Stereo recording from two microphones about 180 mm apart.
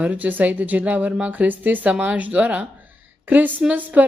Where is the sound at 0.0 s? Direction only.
10° right (ahead or behind).